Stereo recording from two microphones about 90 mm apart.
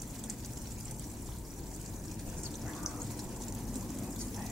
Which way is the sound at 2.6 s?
Centre (ahead or behind).